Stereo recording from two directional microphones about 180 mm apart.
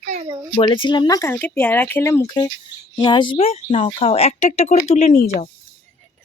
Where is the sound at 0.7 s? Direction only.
25° left (ahead or behind).